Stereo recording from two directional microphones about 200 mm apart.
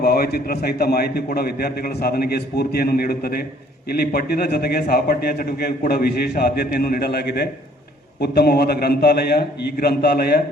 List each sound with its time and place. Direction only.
0.0 s a man's voice: 50° left (ahead or behind)